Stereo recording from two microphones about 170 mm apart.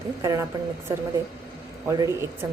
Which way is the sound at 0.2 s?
20° right (ahead or behind).